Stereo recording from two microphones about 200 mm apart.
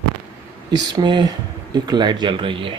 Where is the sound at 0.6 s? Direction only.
20° right (ahead or behind).